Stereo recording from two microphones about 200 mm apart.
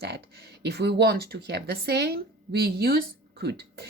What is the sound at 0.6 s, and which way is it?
A woman's voice, 55° right (ahead or behind).